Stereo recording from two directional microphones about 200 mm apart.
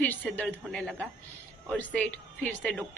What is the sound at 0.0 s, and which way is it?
A woman's voice, 10° left (ahead or behind).